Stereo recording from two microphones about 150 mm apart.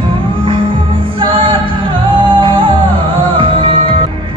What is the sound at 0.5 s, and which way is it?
Music, 35° right (ahead or behind).